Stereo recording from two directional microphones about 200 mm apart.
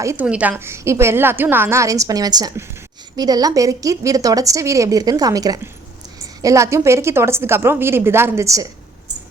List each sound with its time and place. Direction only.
0.0 s a woman's voice: 10° right (ahead or behind)